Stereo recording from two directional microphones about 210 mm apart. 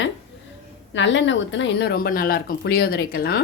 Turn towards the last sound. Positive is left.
turn(degrees=50)  # may be behind; listen again after turning